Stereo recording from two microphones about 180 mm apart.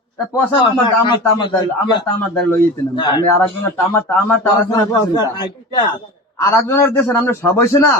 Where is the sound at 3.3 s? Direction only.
10° left (ahead or behind).